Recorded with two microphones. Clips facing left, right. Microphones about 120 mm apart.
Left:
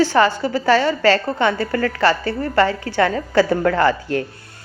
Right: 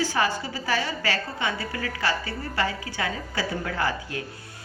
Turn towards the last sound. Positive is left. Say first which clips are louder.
# left 10 dB
turn(degrees=65)  # may be behind; listen again after turning